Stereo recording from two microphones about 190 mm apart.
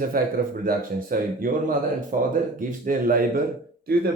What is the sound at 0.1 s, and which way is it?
Speech, 50° right (ahead or behind).